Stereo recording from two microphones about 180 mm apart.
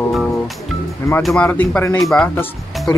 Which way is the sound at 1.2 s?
5° left (ahead or behind).